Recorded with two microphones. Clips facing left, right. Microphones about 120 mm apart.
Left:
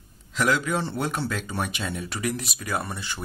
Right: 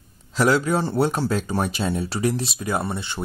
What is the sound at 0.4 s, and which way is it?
Speech, 35° right (ahead or behind).